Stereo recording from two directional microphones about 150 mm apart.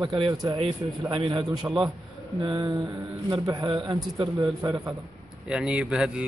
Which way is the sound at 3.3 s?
30° right (ahead or behind).